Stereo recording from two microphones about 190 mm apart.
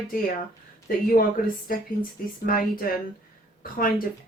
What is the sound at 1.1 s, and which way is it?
Speech, 50° left (ahead or behind).